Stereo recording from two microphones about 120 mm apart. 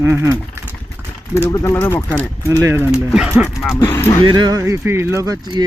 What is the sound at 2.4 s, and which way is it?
Speech, 25° right (ahead or behind).